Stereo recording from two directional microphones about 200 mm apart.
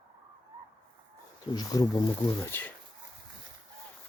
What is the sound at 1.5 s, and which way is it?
Speech, 20° left (ahead or behind).